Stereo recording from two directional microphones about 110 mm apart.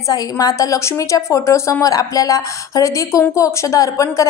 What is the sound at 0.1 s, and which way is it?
A woman's voice, 35° left (ahead or behind).